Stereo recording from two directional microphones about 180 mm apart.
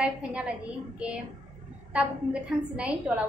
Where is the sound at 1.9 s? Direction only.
5° right (ahead or behind).